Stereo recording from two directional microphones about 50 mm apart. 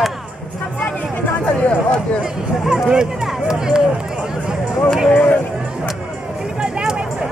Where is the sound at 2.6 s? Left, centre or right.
Centre.